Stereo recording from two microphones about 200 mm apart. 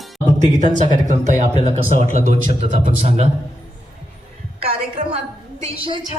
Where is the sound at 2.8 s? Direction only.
35° right (ahead or behind).